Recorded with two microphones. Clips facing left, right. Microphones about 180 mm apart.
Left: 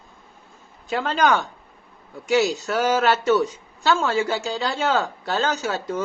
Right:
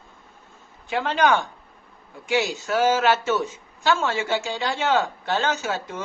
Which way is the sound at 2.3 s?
40° left (ahead or behind).